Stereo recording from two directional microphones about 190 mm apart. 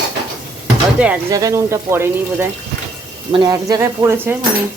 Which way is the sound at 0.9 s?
5° right (ahead or behind).